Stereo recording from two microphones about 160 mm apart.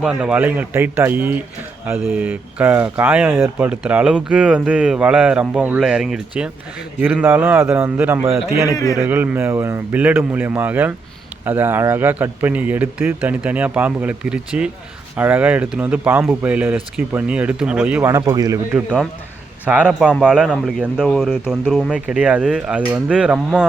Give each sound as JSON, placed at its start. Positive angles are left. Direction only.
{"t": 0.0, "sound": "speech", "side_deg": -5}
{"t": 8.7, "sound": "a man's voice", "side_deg": 20}
{"t": 9.0, "sound": "speech", "side_deg": -10}
{"t": 18.1, "sound": "speech", "side_deg": -20}
{"t": 19.6, "sound": "a man's voice", "side_deg": -10}